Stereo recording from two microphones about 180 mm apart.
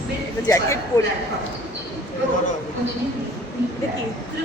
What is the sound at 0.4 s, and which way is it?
Speech, 15° left (ahead or behind).